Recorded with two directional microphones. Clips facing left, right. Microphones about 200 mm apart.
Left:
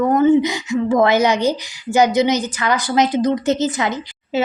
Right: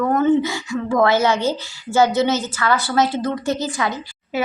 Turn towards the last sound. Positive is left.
turn(degrees=25)  # may be behind; listen again after turning